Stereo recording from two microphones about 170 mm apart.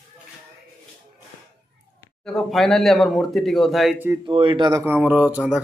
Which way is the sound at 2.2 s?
Centre (ahead or behind).